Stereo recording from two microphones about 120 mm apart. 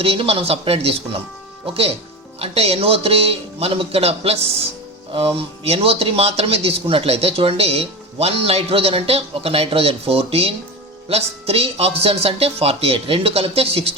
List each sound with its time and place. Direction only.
0.0 s a man's voice: 55° right (ahead or behind)